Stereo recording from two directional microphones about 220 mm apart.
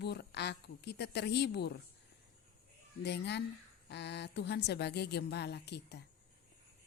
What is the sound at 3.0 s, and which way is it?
A woman's voice, 50° left (ahead or behind).